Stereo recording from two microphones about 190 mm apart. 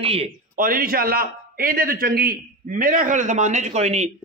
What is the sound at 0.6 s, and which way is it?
A man's voice, 50° right (ahead or behind).